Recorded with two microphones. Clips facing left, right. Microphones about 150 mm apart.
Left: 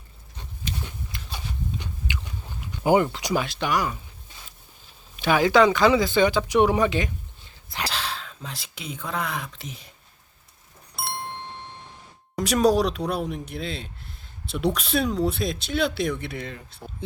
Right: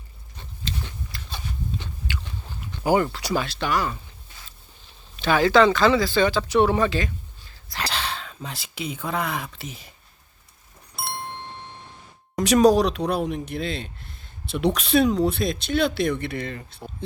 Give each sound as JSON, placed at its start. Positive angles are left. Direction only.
{"t": 0.6, "sound": "a sound", "side_deg": 15}
{"t": 2.1, "sound": "biting", "side_deg": 20}
{"t": 2.6, "sound": "speech", "side_deg": 20}
{"t": 5.1, "sound": "speech", "side_deg": 10}
{"t": 7.9, "sound": "speech", "side_deg": 0}
{"t": 10.9, "sound": "ding-dong", "side_deg": 0}
{"t": 12.4, "sound": "speech", "side_deg": 0}